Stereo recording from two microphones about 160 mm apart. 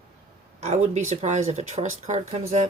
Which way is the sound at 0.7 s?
45° right (ahead or behind).